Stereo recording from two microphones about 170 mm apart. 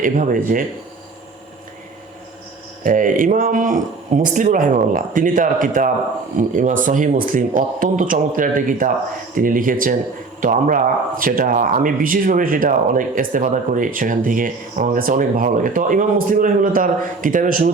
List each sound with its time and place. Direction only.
0.0 s speech: 55° right (ahead or behind)
2.8 s speech: 50° right (ahead or behind)